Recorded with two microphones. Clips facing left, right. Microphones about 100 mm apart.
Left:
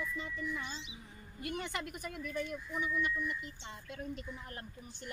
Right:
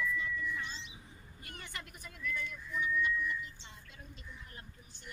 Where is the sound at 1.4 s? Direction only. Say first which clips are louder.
Left 10 dB; 80° left; by 5.1 s 55° left (ahead or behind).